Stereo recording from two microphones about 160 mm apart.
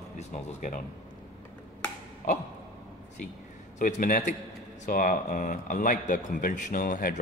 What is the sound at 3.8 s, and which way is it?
A man's voice, 55° left (ahead or behind).